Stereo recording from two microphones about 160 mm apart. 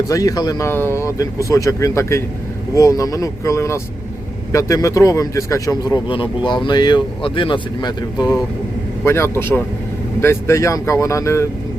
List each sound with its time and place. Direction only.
0.1 s a man's voice: 20° left (ahead or behind)
9.0 s a man's voice: 15° left (ahead or behind)